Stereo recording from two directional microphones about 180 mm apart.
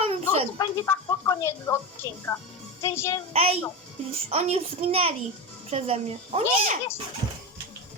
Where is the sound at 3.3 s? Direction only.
35° right (ahead or behind).